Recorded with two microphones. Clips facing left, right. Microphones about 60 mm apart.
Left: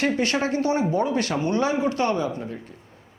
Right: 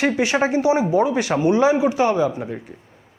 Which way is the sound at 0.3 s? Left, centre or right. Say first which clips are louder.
Right 5 dB; centre.